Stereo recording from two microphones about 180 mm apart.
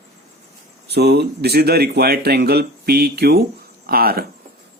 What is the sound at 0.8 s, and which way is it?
Speech, 65° right (ahead or behind).